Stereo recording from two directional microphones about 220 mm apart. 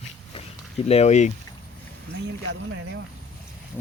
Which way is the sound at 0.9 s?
30° left (ahead or behind).